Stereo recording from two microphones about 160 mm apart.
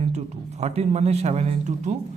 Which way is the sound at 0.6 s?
40° right (ahead or behind).